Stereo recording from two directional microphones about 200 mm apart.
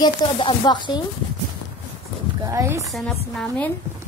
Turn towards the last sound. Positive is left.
turn(degrees=5)  # may be behind; listen again after turning